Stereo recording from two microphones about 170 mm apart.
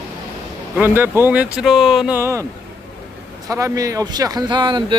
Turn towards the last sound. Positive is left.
turn(degrees=-25)  # may be behind; listen again after turning